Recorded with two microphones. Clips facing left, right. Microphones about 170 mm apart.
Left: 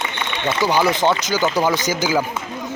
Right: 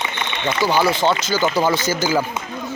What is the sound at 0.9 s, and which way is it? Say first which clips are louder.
Speech: even; 15° left (ahead or behind).